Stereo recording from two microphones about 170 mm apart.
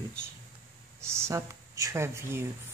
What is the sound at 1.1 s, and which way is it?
Speech, 15° right (ahead or behind).